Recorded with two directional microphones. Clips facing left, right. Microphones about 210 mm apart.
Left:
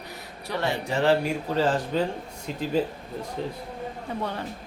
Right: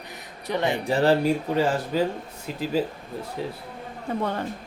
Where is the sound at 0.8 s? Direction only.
35° right (ahead or behind).